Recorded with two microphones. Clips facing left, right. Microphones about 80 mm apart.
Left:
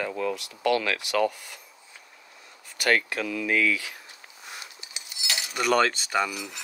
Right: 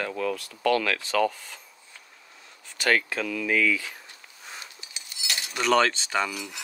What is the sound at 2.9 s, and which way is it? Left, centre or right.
Speech, centre.